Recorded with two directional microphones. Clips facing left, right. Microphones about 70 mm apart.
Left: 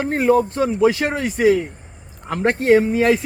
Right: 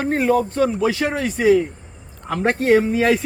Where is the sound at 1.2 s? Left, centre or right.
Centre.